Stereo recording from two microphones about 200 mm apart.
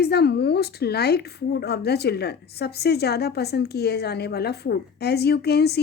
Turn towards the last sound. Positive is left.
turn(degrees=55)  # may be behind; listen again after turning